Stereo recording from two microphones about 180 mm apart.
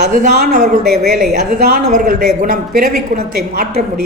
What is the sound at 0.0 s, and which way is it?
Speech, 50° right (ahead or behind).